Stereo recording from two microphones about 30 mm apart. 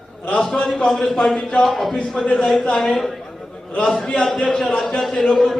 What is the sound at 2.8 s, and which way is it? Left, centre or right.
A man's voice, left.